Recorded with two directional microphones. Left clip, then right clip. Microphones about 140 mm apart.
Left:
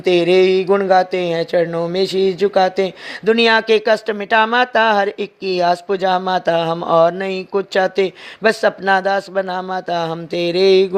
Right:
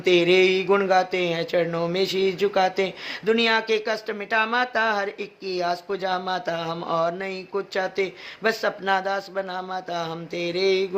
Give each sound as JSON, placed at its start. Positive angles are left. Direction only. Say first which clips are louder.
{"t": 0.0, "sound": "speech", "louder": "left 5 dB", "side_deg": 40}